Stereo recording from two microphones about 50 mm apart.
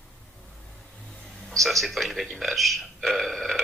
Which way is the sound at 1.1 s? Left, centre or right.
Centre.